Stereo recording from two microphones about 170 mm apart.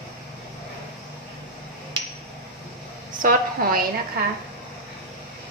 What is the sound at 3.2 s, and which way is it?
Speech, 50° right (ahead or behind).